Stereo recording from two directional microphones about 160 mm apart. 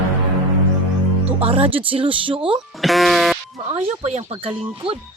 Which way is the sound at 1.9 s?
35° right (ahead or behind).